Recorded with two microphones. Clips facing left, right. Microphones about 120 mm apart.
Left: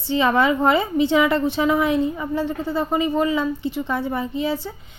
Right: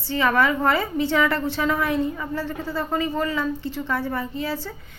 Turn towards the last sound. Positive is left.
turn(degrees=20)  # may be behind; listen again after turning